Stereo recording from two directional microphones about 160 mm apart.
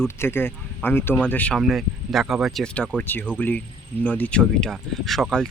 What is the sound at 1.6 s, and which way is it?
Speech, centre (ahead or behind).